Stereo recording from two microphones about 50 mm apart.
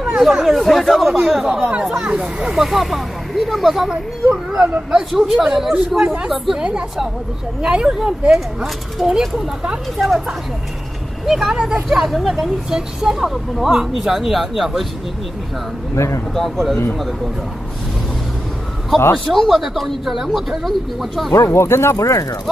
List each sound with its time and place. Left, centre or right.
0.0 s chatter: centre
0.4 s speech: centre
1.6 s speech: centre
2.6 s speech: centre
6.0 s speech: right
6.3 s speech: centre
7.6 s speech: centre
11.2 s speech: centre
15.9 s speech: left
16.3 s speech: centre
19.3 s speech: centre
21.3 s speech: left